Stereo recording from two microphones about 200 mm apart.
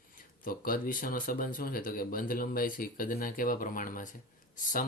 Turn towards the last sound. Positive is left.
turn(degrees=40)  # may be behind; listen again after turning